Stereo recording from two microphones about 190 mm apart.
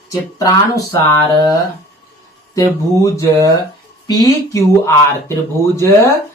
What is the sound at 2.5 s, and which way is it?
Speech, 15° left (ahead or behind).